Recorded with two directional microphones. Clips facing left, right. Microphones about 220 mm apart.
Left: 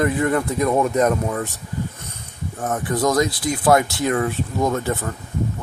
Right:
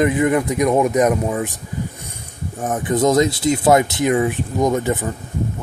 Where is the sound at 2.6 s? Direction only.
20° right (ahead or behind).